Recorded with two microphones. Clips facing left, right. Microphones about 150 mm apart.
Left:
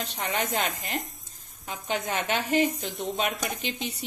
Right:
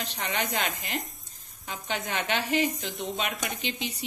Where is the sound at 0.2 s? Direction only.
40° left (ahead or behind).